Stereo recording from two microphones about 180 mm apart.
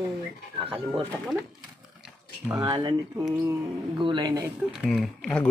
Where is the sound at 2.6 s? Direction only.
25° right (ahead or behind).